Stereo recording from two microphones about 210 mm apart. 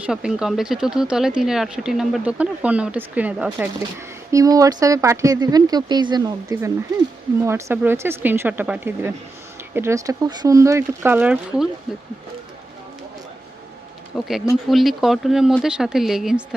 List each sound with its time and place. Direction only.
0.0 s speech: 5° right (ahead or behind)
14.2 s speech: centre (ahead or behind)